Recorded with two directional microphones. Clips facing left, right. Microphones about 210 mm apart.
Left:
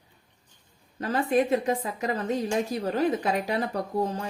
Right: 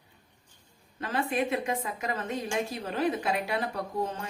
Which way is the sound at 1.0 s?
40° left (ahead or behind).